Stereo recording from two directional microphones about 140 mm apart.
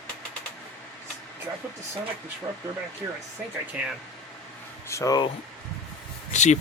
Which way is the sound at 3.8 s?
10° right (ahead or behind).